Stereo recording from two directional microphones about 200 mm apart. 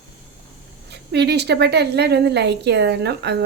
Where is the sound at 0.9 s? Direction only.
55° right (ahead or behind).